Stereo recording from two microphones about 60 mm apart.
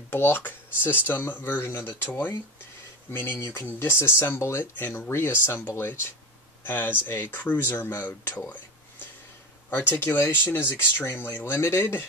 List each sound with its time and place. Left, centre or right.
0.1 s speech: left
9.7 s speech: left